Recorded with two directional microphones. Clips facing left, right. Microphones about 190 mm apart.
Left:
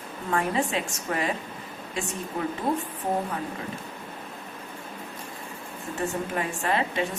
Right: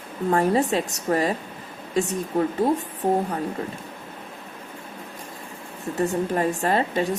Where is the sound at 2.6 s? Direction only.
35° right (ahead or behind).